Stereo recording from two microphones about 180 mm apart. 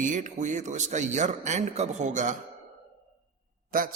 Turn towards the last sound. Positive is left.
turn(degrees=-50)  # may be behind; listen again after turning